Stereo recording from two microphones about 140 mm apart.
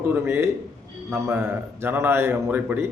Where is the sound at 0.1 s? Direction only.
15° right (ahead or behind).